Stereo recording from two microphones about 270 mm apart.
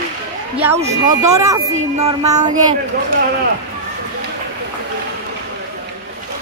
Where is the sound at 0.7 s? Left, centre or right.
Right.